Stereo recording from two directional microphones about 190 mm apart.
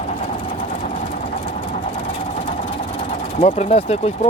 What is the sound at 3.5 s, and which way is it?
Speech, 40° left (ahead or behind).